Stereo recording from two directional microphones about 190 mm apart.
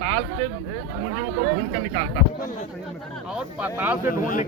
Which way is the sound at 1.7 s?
30° right (ahead or behind).